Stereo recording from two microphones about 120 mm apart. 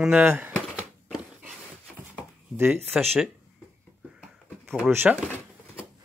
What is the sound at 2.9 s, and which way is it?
Speech, 5° right (ahead or behind).